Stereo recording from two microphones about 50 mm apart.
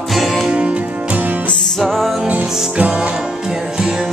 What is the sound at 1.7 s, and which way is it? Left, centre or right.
Music, centre.